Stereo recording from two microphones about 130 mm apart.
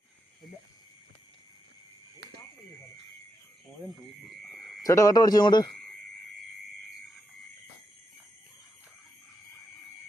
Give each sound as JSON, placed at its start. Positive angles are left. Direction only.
{"t": 4.8, "sound": "speech", "side_deg": 25}